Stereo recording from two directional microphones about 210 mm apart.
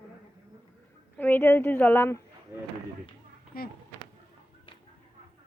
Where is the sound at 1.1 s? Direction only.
10° left (ahead or behind).